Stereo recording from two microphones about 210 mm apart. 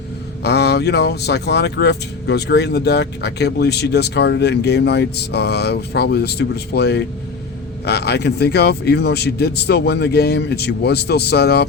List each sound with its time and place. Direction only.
0.4 s speech: 50° left (ahead or behind)